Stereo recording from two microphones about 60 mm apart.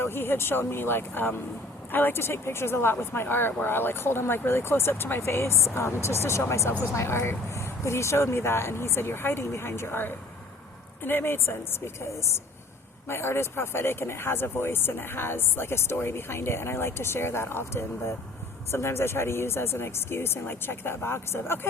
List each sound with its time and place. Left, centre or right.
0.0 s speech: left
13.1 s speech: left